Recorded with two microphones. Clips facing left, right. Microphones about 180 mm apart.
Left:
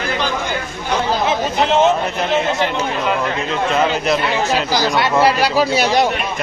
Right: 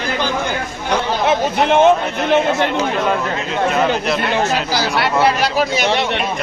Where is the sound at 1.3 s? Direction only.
55° right (ahead or behind).